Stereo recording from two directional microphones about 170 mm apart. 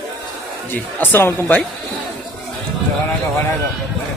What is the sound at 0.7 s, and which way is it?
Speech, 10° left (ahead or behind).